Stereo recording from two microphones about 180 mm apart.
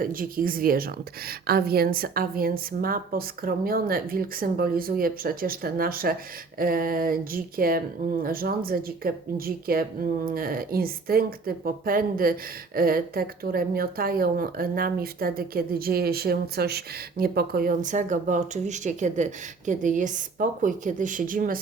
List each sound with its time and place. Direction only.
0.0 s a woman's voice: 50° right (ahead or behind)